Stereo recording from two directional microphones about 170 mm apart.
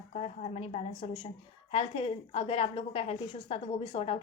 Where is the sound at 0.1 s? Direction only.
40° left (ahead or behind).